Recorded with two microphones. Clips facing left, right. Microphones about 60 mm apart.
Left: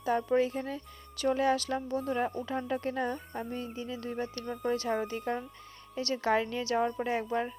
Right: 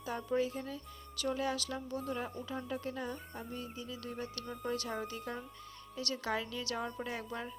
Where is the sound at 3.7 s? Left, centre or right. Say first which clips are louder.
Left 6 dB; left.